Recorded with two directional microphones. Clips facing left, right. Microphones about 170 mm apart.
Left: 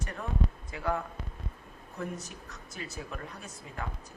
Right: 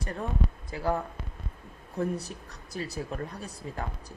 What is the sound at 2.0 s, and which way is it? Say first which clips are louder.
Speech: right 7 dB; 35° right (ahead or behind).